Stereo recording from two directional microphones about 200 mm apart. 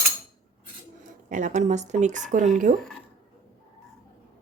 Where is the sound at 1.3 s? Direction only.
40° right (ahead or behind).